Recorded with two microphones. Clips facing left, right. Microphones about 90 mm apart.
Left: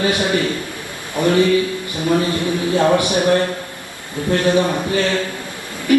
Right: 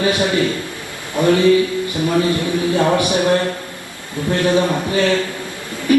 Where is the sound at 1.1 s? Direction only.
20° right (ahead or behind).